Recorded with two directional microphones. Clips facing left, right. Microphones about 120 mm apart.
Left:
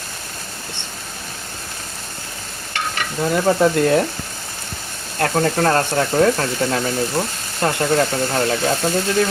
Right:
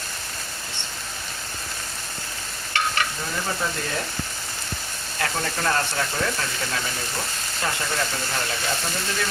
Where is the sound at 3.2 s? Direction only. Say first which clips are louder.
Left 12 dB; 60° left (ahead or behind).